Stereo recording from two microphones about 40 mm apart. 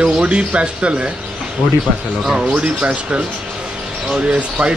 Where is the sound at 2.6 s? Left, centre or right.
Right.